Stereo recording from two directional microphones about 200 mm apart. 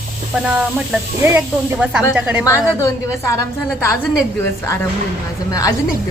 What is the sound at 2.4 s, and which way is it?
A woman's voice, 15° left (ahead or behind).